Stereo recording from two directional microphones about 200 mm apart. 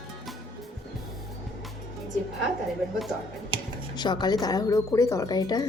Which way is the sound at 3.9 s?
20° left (ahead or behind).